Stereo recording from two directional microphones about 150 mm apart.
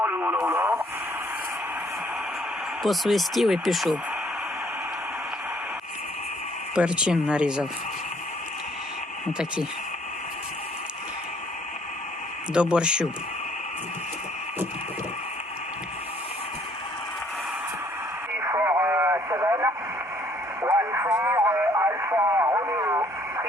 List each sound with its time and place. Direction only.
0.0 s radio: 10° right (ahead or behind)
0.4 s speech: 15° right (ahead or behind)
2.8 s speech: centre (ahead or behind)
6.7 s speech: 5° right (ahead or behind)
9.2 s speech: 5° right (ahead or behind)
12.5 s speech: 5° right (ahead or behind)
18.3 s radio: 15° right (ahead or behind)